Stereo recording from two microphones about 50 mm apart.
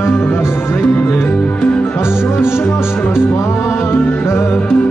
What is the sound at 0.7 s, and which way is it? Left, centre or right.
Music, left.